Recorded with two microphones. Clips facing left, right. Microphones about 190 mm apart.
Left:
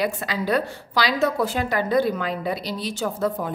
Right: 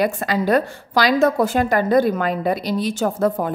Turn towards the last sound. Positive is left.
turn(degrees=-50)  # may be behind; listen again after turning